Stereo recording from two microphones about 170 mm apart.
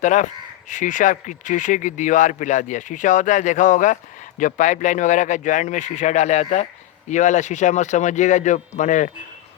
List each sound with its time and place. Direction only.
0.0 s speech: 45° left (ahead or behind)